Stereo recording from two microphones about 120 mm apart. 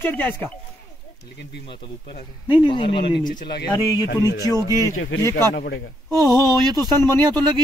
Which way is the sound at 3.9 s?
30° left (ahead or behind).